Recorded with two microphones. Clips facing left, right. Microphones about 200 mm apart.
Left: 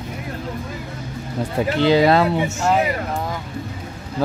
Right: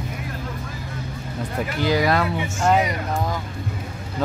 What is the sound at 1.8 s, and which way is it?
Speech, 25° left (ahead or behind).